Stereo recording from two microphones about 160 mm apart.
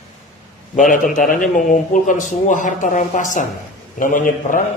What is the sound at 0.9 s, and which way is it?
A man's voice, 55° left (ahead or behind).